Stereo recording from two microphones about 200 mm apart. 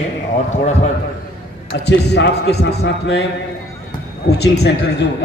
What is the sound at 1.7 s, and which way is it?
A man's voice, 55° left (ahead or behind).